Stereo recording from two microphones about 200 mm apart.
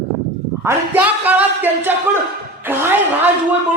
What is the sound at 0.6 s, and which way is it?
Speech, 10° right (ahead or behind).